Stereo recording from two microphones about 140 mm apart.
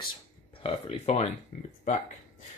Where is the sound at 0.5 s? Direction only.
40° left (ahead or behind).